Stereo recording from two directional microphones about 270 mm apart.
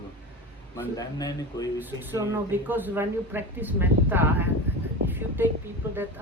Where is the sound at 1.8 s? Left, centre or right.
Centre.